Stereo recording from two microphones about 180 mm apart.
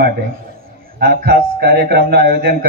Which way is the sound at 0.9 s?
60° right (ahead or behind).